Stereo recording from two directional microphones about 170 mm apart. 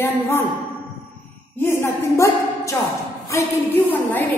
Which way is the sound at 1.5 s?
15° left (ahead or behind).